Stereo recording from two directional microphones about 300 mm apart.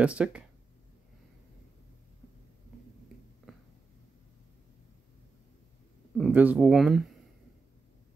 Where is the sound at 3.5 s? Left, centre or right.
Centre.